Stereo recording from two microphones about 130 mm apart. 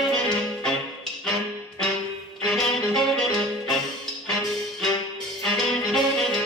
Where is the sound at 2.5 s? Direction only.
Centre (ahead or behind).